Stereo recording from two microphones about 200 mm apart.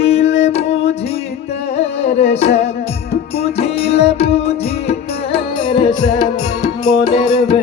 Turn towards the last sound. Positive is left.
turn(degrees=35)  # may be behind; listen again after turning